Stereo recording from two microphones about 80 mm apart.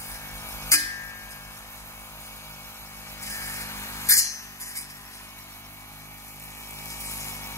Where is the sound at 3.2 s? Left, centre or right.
Left.